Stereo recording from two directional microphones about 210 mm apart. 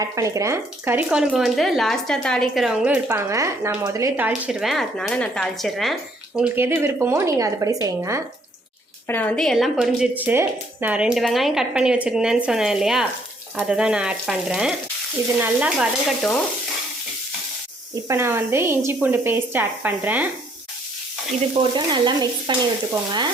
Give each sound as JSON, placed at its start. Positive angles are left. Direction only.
{"t": 0.0, "sound": "a woman's voice", "side_deg": -15}
{"t": 4.4, "sound": "speech", "side_deg": 0}
{"t": 9.0, "sound": "speech", "side_deg": 10}
{"t": 18.1, "sound": "a woman's voice", "side_deg": -10}
{"t": 21.6, "sound": "stir", "side_deg": -20}